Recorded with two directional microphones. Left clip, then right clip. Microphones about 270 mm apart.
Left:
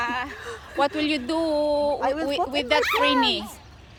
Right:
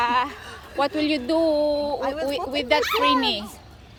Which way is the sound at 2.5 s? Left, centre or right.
Centre.